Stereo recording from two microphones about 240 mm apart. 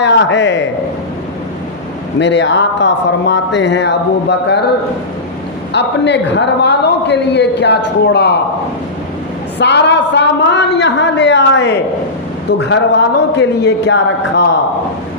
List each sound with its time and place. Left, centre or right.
0.0 s a man's voice: left
2.1 s a man's voice: left
5.7 s a man's voice: left
9.6 s a man's voice: left